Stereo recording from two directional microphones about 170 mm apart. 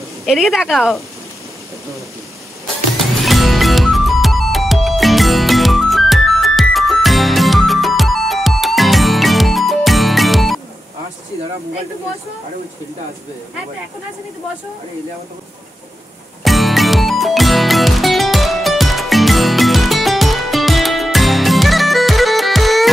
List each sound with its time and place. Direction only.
0.2 s speech: centre (ahead or behind)
3.3 s music: centre (ahead or behind)
16.4 s music: centre (ahead or behind)